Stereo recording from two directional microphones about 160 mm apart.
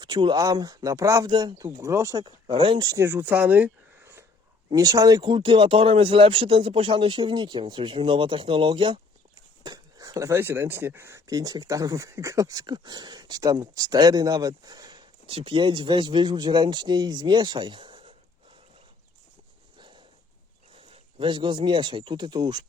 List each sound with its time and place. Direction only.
0.0 s speech: 30° right (ahead or behind)
20.7 s speech: 35° right (ahead or behind)